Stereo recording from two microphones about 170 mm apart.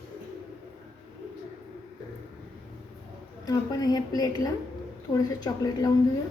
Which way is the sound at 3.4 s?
20° left (ahead or behind).